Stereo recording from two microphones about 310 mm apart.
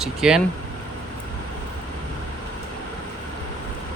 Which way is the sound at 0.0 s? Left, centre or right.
Centre.